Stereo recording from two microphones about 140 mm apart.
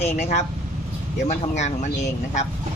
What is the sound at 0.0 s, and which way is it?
Speech, 55° left (ahead or behind).